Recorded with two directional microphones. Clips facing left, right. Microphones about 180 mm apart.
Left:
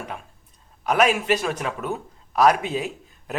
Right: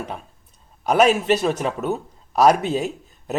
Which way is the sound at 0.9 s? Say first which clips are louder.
Right 3 dB; 35° right (ahead or behind).